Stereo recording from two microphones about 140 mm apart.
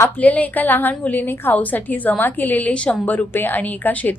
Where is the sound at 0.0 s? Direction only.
10° left (ahead or behind).